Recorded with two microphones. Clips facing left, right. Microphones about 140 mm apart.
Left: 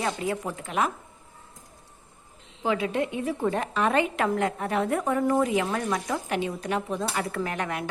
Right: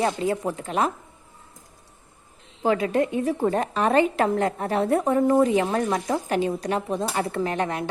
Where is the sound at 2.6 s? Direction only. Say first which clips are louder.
Right 4 dB; 45° right (ahead or behind).